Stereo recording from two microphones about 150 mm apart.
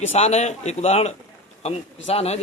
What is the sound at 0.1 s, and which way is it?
Speech, 45° left (ahead or behind).